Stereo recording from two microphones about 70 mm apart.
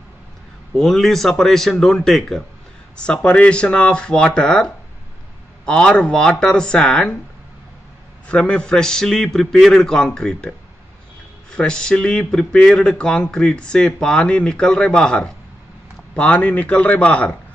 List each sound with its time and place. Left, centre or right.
0.7 s speech: centre
8.3 s speech: centre
11.5 s a man's voice: centre